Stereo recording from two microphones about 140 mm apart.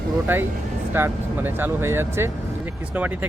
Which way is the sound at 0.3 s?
15° right (ahead or behind).